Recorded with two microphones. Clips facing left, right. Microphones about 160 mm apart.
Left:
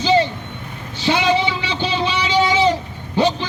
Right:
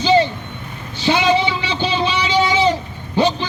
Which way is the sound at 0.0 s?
20° right (ahead or behind).